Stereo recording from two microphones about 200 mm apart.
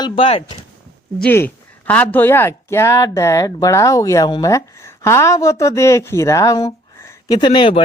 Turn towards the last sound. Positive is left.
turn(degrees=25)  # may be behind; listen again after turning